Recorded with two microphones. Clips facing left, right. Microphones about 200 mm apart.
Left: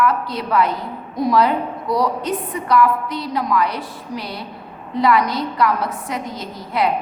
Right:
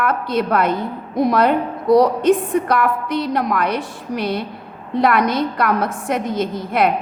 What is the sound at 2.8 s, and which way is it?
Speech, 60° right (ahead or behind).